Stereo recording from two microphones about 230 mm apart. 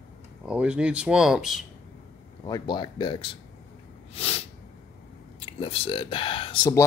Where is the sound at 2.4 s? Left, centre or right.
Centre.